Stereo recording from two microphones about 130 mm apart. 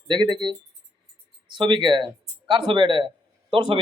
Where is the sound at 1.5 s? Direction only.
35° right (ahead or behind).